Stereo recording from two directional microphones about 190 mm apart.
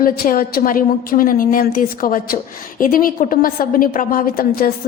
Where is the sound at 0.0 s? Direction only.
50° left (ahead or behind).